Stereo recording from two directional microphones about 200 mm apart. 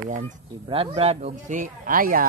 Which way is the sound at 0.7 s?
25° right (ahead or behind).